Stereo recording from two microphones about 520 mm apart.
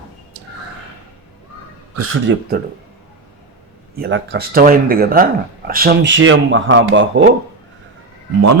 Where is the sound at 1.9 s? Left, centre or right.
Right.